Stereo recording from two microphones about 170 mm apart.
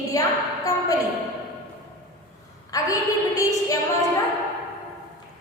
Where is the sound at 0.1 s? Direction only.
20° left (ahead or behind).